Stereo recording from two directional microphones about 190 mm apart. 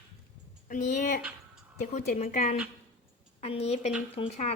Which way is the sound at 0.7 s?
45° left (ahead or behind).